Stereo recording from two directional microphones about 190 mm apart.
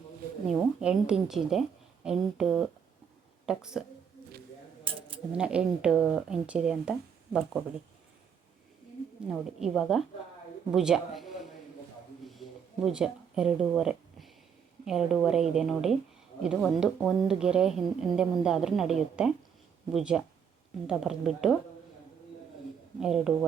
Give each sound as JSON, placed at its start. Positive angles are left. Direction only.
{"t": 0.4, "sound": "speech", "side_deg": -5}
{"t": 4.8, "sound": "a sound", "side_deg": -30}
{"t": 5.4, "sound": "speech", "side_deg": -5}
{"t": 9.3, "sound": "speech", "side_deg": 0}
{"t": 12.3, "sound": "a sound", "side_deg": 0}
{"t": 14.8, "sound": "speech", "side_deg": 0}
{"t": 23.0, "sound": "speech", "side_deg": -5}